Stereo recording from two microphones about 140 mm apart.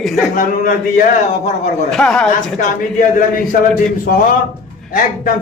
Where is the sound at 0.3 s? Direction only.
75° left (ahead or behind).